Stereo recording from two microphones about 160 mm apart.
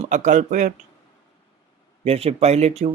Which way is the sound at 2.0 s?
40° right (ahead or behind).